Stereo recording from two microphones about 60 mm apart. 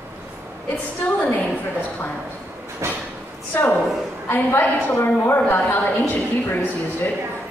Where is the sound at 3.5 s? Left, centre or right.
Left.